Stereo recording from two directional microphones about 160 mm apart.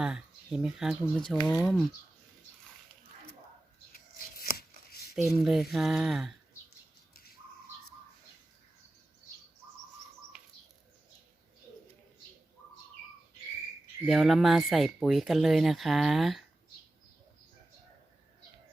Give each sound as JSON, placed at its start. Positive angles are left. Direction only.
{"t": 0.0, "sound": "speech", "side_deg": -5}
{"t": 3.9, "sound": "a sound", "side_deg": 65}
{"t": 5.1, "sound": "speech", "side_deg": 0}
{"t": 14.0, "sound": "speech", "side_deg": 0}